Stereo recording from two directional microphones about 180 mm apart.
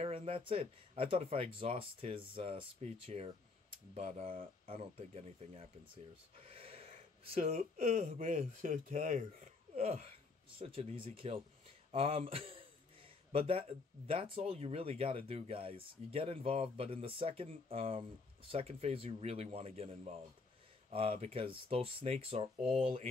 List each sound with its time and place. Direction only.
0.0 s speech: 35° right (ahead or behind)
12.3 s a sound: 30° right (ahead or behind)
14.5 s speech: 35° right (ahead or behind)